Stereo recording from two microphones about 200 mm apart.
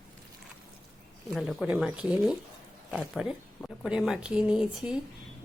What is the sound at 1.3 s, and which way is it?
A woman's voice, centre (ahead or behind).